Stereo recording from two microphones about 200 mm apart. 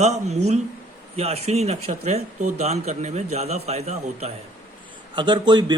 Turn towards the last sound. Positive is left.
turn(degrees=-20)  # may be behind; listen again after turning